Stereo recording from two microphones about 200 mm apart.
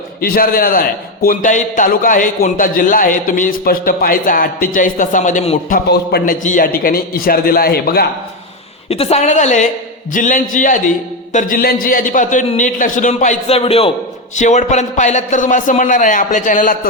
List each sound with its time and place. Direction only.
0.2 s a man's voice: 45° left (ahead or behind)
6.4 s a man's voice: 40° left (ahead or behind)
8.9 s a man's voice: 30° left (ahead or behind)